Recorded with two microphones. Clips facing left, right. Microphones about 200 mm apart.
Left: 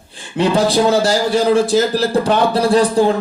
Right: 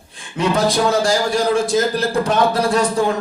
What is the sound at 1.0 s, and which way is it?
Speech, centre (ahead or behind).